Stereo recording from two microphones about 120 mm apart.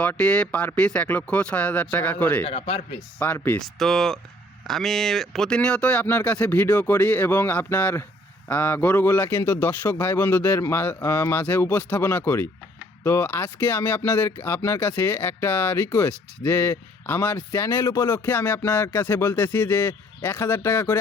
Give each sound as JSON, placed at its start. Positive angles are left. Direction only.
{"t": 0.0, "sound": "speech", "side_deg": 10}
{"t": 2.4, "sound": "speech", "side_deg": 50}
{"t": 3.3, "sound": "speech", "side_deg": 15}
{"t": 3.8, "sound": "speech", "side_deg": 0}